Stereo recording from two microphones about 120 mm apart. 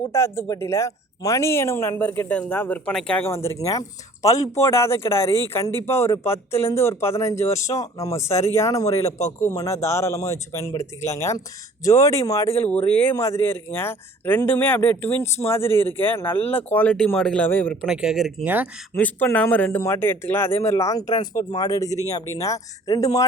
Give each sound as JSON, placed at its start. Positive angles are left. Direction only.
{"t": 0.1, "sound": "speech", "side_deg": 25}
{"t": 3.2, "sound": "speech", "side_deg": 20}
{"t": 13.1, "sound": "a man's voice", "side_deg": 20}
{"t": 17.7, "sound": "speech", "side_deg": -5}
{"t": 18.4, "sound": "speech", "side_deg": -15}
{"t": 18.9, "sound": "speech", "side_deg": 10}